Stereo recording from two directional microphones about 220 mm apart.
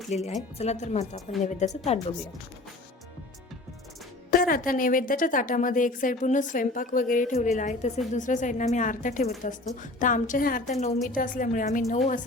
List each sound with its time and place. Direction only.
0.1 s a woman's voice: 30° left (ahead or behind)
4.3 s a woman's voice: 40° left (ahead or behind)